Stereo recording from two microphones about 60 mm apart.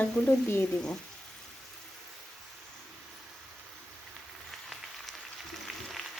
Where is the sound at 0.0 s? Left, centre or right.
Left.